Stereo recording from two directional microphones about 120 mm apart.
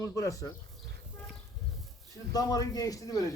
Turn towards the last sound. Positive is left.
turn(degrees=30)  # may be behind; listen again after turning